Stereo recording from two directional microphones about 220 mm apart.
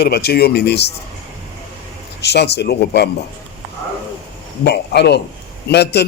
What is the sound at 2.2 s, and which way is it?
Speech, 50° left (ahead or behind).